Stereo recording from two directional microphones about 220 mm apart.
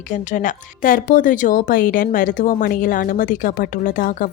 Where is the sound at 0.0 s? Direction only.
35° left (ahead or behind).